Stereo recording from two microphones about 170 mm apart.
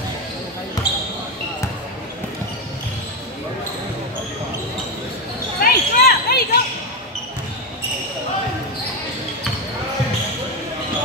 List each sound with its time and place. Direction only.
5.6 s children playing: 65° left (ahead or behind)